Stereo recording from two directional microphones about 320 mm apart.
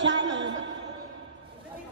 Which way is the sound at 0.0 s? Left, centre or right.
Right.